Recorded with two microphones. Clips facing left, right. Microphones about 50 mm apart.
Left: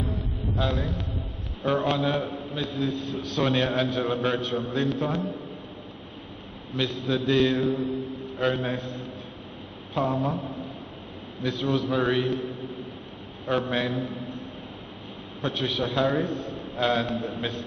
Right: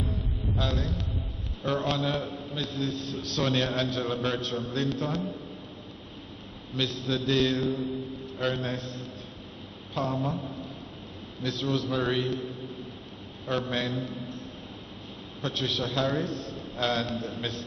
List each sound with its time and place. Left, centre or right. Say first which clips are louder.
0.0 s music: left 2 dB; centre
0.6 s a man's voice: left 3 dB; centre
6.8 s a man's voice: left 3 dB; centre
10.1 s a man's voice: left 3 dB; centre
11.4 s a man's voice: left 3 dB; centre
13.5 s a man's voice: left 4 dB; centre
15.4 s a man's voice: left 3 dB; centre